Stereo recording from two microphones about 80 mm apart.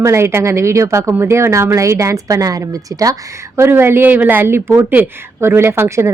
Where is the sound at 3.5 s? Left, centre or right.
Right.